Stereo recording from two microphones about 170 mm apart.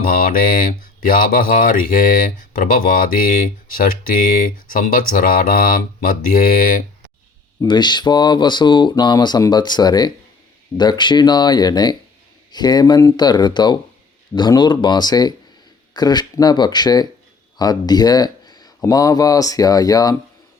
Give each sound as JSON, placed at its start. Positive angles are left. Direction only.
{"t": 0.0, "sound": "speech", "side_deg": 55}
{"t": 7.6, "sound": "speech", "side_deg": 25}